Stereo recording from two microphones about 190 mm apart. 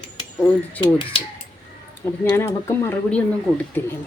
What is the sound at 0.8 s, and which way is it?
Speech, 25° left (ahead or behind).